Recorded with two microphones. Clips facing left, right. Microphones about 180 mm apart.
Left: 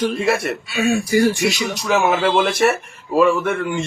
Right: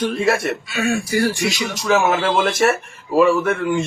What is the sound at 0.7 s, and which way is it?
Speech, 15° left (ahead or behind).